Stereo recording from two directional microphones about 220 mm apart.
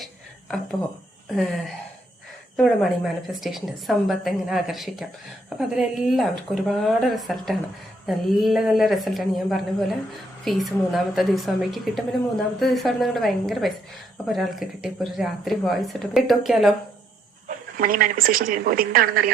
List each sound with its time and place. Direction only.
1.4 s a woman's voice: centre (ahead or behind)
17.5 s a woman's voice: 40° right (ahead or behind)